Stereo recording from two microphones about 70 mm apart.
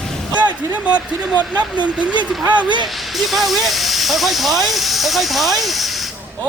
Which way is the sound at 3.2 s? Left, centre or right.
Centre.